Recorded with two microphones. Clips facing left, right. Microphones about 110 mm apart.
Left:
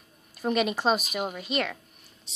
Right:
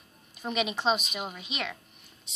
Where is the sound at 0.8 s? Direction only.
45° left (ahead or behind).